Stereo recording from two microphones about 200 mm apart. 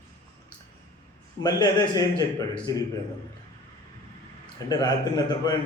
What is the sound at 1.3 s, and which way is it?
A man's voice, 20° left (ahead or behind).